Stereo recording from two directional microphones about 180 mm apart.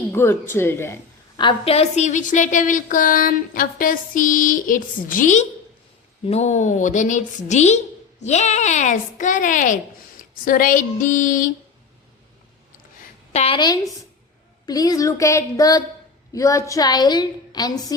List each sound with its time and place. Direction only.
0.1 s speech: 15° left (ahead or behind)
1.4 s a woman's voice: 30° left (ahead or behind); by 11.5 s 45° left (ahead or behind)
13.3 s a woman's voice: 30° left (ahead or behind)